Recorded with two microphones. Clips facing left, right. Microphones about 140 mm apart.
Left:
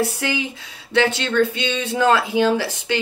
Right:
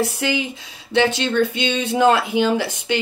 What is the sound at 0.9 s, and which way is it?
Speech, 20° right (ahead or behind).